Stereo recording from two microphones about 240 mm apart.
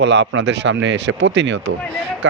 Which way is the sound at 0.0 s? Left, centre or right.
Right.